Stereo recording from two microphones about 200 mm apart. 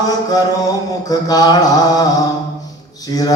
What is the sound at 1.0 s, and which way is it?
Mantra, 20° left (ahead or behind).